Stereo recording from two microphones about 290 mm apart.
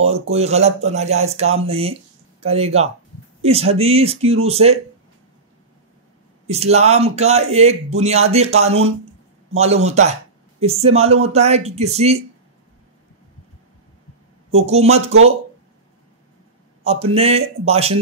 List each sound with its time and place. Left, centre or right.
0.3 s speech: right
6.4 s speech: right
14.5 s speech: right
16.8 s speech: right